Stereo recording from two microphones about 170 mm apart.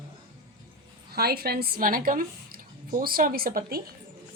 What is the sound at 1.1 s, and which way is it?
A woman's voice, 65° right (ahead or behind).